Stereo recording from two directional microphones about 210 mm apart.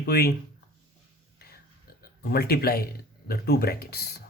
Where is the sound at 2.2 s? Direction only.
50° left (ahead or behind).